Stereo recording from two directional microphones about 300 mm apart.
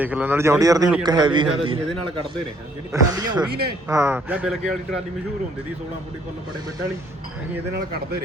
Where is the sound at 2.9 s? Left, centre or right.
Centre.